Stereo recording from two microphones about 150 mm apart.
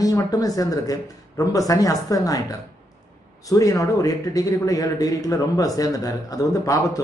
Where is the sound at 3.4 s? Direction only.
25° left (ahead or behind).